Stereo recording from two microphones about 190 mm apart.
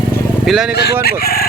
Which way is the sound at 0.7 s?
55° left (ahead or behind).